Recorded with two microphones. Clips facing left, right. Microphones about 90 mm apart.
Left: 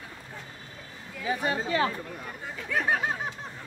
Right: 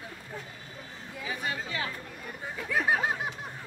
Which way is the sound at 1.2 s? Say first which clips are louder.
Left 6 dB; 35° left (ahead or behind).